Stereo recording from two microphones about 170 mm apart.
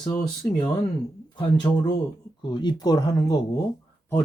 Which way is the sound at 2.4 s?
25° left (ahead or behind).